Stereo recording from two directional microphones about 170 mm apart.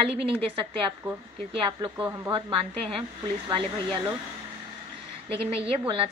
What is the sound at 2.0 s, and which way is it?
Speech, 10° right (ahead or behind).